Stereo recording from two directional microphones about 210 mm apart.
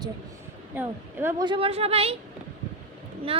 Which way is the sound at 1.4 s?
25° right (ahead or behind).